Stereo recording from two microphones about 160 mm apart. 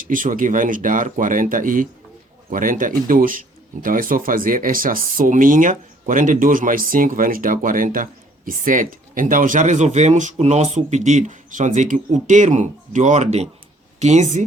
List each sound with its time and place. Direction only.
0.0 s speech: 55° right (ahead or behind)